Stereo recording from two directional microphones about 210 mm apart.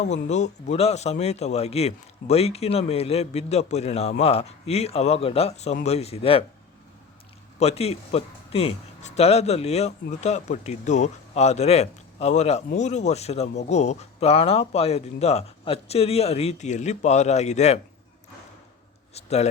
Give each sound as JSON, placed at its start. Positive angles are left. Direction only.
{"t": 0.0, "sound": "speech", "side_deg": 35}
{"t": 7.6, "sound": "speech", "side_deg": 30}
{"t": 19.1, "sound": "a man's voice", "side_deg": 30}